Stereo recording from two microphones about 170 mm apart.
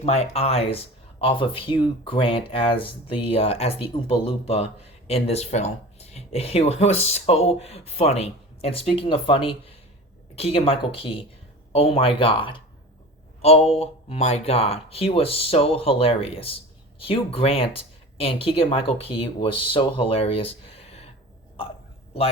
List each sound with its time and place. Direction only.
0.0 s speech: 35° left (ahead or behind)